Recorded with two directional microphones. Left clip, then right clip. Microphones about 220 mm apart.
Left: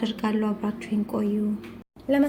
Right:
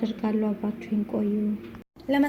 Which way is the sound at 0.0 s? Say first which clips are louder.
Left 1 dB; 15° left (ahead or behind).